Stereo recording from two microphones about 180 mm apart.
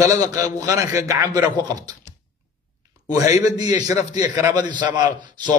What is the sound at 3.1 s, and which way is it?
A man's voice, 20° right (ahead or behind).